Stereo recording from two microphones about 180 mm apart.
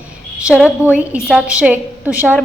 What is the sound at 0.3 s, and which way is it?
A woman's voice, 5° right (ahead or behind).